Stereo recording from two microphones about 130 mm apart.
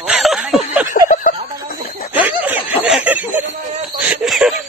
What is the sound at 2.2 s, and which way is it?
Snicker, 10° right (ahead or behind).